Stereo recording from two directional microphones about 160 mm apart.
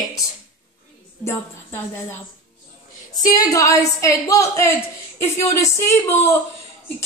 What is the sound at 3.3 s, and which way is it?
Speech, 20° left (ahead or behind).